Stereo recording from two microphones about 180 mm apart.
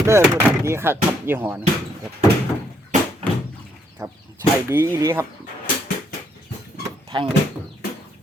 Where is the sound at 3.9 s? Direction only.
15° right (ahead or behind).